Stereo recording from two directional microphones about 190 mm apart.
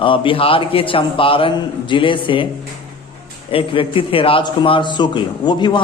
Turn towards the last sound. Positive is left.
turn(degrees=25)  # may be behind; listen again after turning